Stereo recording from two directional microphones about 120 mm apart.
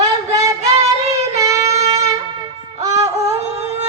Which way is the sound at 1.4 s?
30° right (ahead or behind).